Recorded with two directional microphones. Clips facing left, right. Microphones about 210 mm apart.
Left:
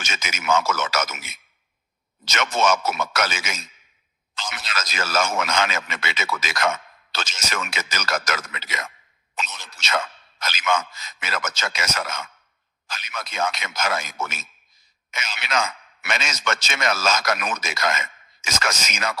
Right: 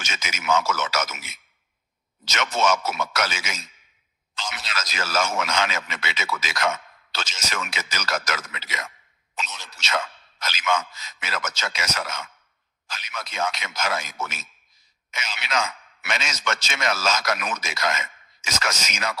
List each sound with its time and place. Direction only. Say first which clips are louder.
0.0 s a man's voice: left 2 dB; 50° left (ahead or behind)